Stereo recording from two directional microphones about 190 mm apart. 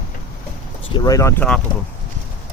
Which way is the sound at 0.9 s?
20° left (ahead or behind).